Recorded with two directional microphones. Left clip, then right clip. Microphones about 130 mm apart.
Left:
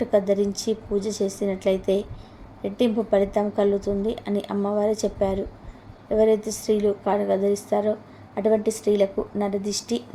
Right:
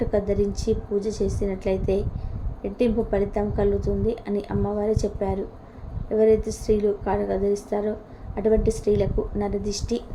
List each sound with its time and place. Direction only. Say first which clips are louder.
0.1 s a woman's voice: left 3 dB; 25° left (ahead or behind)